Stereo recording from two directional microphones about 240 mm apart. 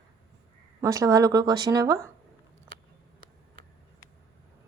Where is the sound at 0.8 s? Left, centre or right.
Centre.